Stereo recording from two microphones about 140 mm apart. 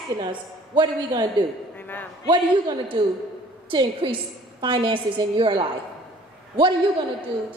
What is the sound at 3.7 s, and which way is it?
A woman's voice, 35° right (ahead or behind).